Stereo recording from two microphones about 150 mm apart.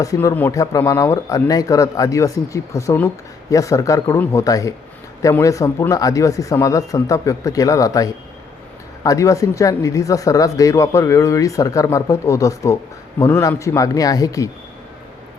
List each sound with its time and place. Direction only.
0.0 s speech: 20° left (ahead or behind)